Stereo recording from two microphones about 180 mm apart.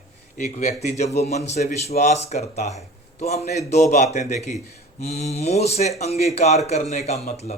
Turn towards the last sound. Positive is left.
turn(degrees=35)  # may be behind; listen again after turning